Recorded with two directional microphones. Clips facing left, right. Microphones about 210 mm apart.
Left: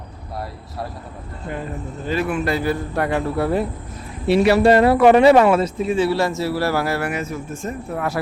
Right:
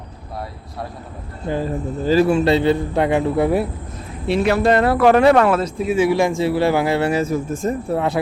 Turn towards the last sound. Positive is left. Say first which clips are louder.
# right 6 dB
turn(degrees=-35)  # may be behind; listen again after turning